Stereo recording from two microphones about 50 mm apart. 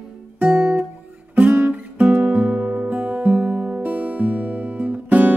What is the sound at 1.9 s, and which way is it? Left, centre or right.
Music, right.